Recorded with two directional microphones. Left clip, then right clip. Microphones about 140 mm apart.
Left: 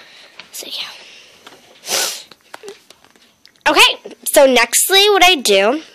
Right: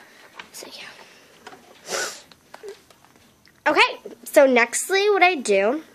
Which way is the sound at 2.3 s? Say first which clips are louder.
Left 5 dB; 60° left (ahead or behind).